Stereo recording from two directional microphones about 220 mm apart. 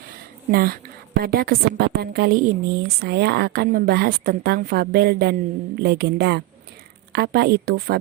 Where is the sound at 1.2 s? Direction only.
45° right (ahead or behind).